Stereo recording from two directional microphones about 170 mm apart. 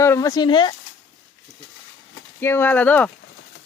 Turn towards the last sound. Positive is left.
turn(degrees=10)  # may be behind; listen again after turning